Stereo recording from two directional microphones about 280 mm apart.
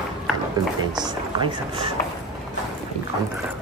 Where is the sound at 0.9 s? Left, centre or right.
Centre.